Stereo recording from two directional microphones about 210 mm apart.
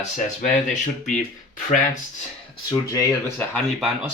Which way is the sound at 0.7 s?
35° left (ahead or behind).